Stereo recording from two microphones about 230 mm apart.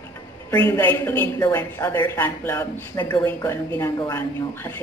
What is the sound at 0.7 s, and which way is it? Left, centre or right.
A woman's voice, centre.